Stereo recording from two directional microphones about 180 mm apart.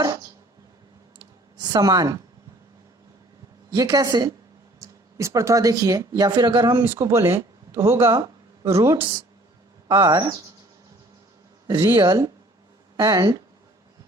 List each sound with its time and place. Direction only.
1.5 s a woman's voice: 20° right (ahead or behind)
3.7 s speech: 20° right (ahead or behind)
11.7 s speech: 20° right (ahead or behind)